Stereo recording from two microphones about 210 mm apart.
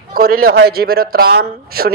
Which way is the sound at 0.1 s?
45° right (ahead or behind).